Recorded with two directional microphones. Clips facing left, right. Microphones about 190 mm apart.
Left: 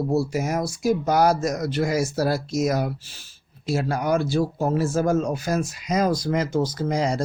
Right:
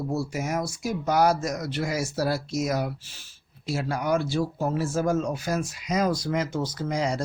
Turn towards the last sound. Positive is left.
turn(degrees=35)  # may be behind; listen again after turning